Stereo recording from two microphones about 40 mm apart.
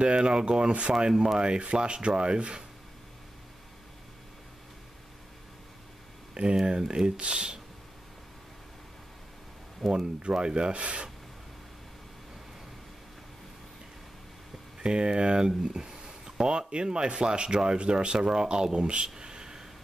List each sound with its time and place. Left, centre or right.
0.0 s speech: right
0.9 s speech: centre
1.4 s speech: right
6.6 s speech: right
9.8 s speech: centre
14.8 s speech: right
19.1 s a sound: centre